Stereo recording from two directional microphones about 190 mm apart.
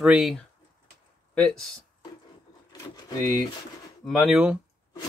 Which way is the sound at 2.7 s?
20° left (ahead or behind).